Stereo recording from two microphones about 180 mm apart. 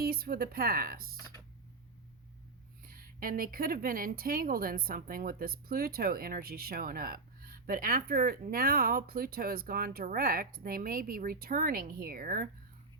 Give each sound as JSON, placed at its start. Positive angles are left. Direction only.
{"t": 0.0, "sound": "speech", "side_deg": -55}
{"t": 2.8, "sound": "speech", "side_deg": -50}